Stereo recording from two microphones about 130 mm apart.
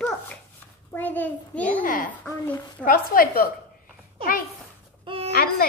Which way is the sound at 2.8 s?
90° left.